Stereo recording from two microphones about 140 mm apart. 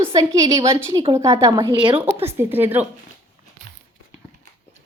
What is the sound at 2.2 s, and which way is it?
Speech, 15° right (ahead or behind).